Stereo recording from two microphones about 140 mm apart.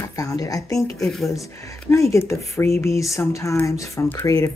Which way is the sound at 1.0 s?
5° left (ahead or behind).